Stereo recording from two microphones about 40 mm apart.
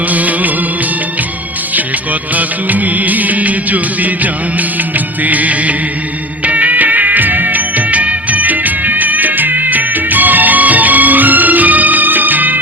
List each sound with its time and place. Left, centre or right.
0.1 s music: right
2.3 s music: right